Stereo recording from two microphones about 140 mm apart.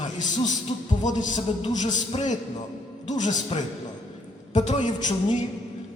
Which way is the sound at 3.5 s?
45° left (ahead or behind).